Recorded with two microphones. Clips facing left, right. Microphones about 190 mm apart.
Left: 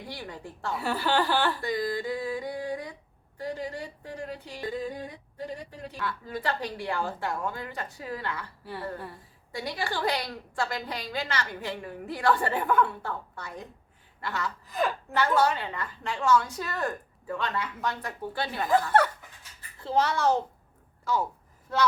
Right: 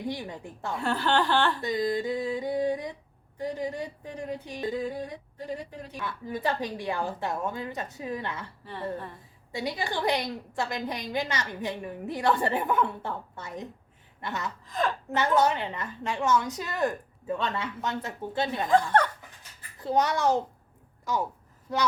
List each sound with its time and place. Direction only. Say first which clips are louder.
0.1 s a woman's voice: right 4 dB; 20° right (ahead or behind)
0.8 s speech: right 1 dB; 10° left (ahead or behind)
1.6 s a woman's voice: right 2 dB; 20° right (ahead or behind)
6.0 s a woman's voice: right 2 dB; 20° right (ahead or behind)
8.6 s speech: right 1 dB; 10° left (ahead or behind)
9.5 s a woman's voice: right 1 dB; 20° right (ahead or behind)
14.2 s gasp: left 1 dB; 20° right (ahead or behind)
14.7 s speech: even; 10° left (ahead or behind)
15.1 s a woman's voice: right 1 dB; 20° right (ahead or behind)
18.7 s speech: even; 5° left (ahead or behind)
19.8 s a child's voice: even; 15° right (ahead or behind)